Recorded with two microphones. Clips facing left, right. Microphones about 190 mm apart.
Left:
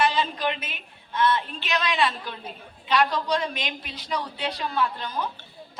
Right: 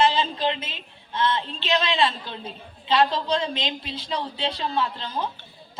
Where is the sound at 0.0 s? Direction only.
25° right (ahead or behind).